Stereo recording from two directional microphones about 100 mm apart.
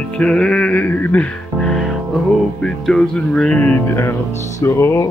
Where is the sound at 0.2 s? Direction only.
10° left (ahead or behind); by 5.0 s 25° left (ahead or behind).